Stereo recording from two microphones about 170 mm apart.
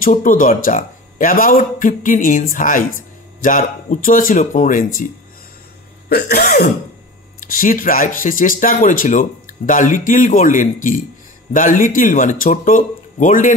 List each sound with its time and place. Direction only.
0.0 s speech: 50° left (ahead or behind)
6.0 s sneeze: 65° left (ahead or behind)
7.3 s speech: 55° left (ahead or behind)